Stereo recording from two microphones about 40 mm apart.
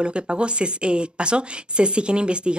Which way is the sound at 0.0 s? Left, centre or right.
Right.